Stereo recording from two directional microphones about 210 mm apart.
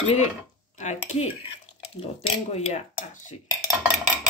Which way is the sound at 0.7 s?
35° left (ahead or behind).